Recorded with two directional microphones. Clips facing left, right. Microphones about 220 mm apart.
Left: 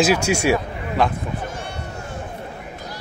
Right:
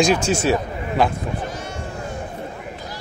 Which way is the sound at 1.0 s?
Centre (ahead or behind).